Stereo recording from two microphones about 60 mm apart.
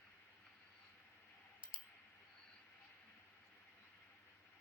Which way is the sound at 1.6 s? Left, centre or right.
Centre.